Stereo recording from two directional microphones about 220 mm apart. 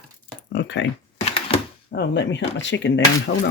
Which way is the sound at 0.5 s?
55° left (ahead or behind).